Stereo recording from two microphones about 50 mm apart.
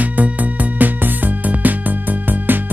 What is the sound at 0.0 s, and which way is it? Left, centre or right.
Music, right.